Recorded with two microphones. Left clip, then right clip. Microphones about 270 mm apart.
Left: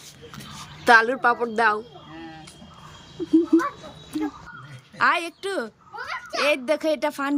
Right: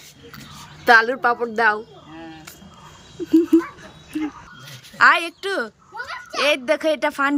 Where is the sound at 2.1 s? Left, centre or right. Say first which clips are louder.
Right 2 dB; centre.